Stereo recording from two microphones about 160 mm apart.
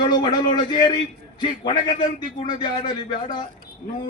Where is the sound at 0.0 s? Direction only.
25° left (ahead or behind).